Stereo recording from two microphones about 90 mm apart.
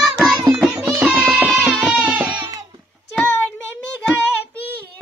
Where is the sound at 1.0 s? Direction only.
15° right (ahead or behind).